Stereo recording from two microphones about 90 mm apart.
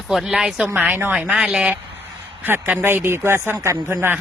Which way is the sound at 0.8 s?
20° right (ahead or behind).